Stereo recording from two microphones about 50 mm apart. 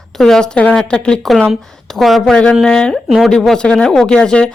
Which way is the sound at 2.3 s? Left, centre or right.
Centre.